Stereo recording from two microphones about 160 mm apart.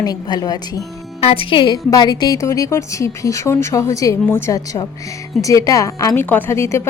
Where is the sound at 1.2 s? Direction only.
35° left (ahead or behind).